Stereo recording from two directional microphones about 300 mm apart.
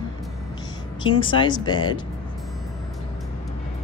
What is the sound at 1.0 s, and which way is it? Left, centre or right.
Speech, centre.